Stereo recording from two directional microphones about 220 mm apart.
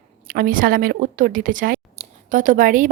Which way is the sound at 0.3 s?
40° right (ahead or behind).